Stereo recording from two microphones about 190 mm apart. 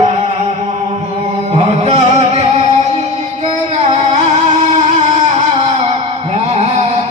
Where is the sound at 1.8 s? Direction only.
35° right (ahead or behind).